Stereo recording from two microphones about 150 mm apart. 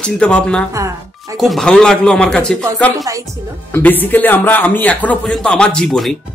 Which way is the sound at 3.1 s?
20° right (ahead or behind).